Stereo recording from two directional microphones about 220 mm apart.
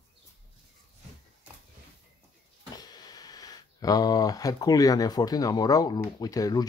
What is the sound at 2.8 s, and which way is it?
Speech, 15° left (ahead or behind).